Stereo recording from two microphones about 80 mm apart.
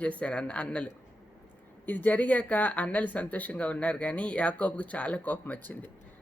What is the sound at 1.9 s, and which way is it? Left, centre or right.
A man's voice, left.